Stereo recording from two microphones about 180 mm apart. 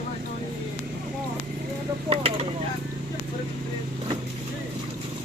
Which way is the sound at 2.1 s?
35° right (ahead or behind).